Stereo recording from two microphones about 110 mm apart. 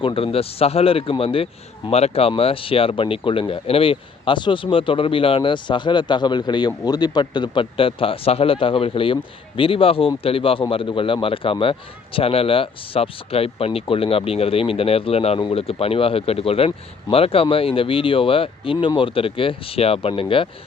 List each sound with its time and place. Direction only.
0.0 s a man's voice: 55° left (ahead or behind)
15.4 s a man's voice: 55° left (ahead or behind)